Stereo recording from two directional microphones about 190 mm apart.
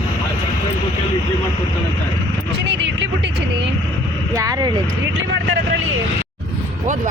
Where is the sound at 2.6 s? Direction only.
70° right (ahead or behind).